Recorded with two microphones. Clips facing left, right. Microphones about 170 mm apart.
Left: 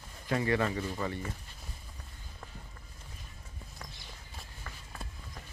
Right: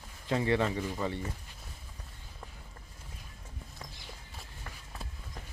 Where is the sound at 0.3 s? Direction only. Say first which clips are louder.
Right 1 dB; 20° right (ahead or behind).